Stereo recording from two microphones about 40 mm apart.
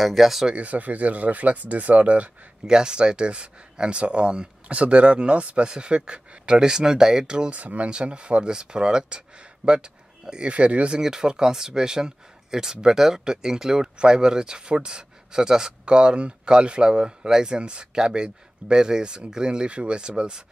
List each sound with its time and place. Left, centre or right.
0.0 s speech: centre
0.5 s speech: right
2.6 s speech: centre
7.4 s speech: right
11.0 s speech: centre